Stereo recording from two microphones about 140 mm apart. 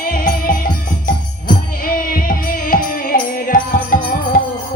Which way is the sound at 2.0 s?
90° left.